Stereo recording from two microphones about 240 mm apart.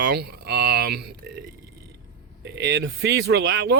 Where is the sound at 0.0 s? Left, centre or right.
Right.